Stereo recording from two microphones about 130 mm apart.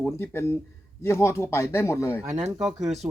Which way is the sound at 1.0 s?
20° left (ahead or behind).